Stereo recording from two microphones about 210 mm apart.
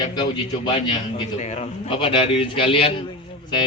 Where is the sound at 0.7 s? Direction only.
30° left (ahead or behind).